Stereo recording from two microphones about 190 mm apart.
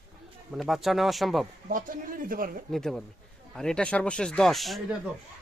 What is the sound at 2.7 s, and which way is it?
Speech, centre (ahead or behind).